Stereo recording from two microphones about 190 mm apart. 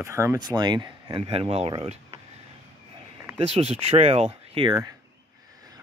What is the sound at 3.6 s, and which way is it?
Speech, 30° right (ahead or behind).